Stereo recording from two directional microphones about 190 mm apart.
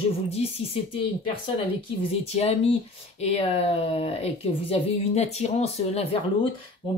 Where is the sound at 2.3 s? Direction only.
35° left (ahead or behind).